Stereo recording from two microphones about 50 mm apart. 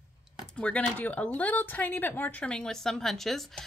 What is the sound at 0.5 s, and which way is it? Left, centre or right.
Speech, left.